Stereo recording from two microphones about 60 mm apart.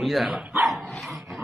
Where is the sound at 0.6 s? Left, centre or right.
Centre.